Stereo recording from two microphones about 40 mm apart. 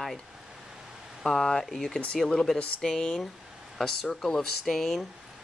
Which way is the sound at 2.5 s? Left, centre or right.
Left.